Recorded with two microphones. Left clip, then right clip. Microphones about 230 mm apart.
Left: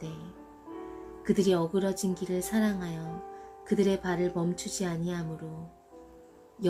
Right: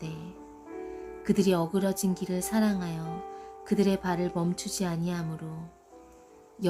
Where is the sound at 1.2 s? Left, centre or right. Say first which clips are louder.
Even; right.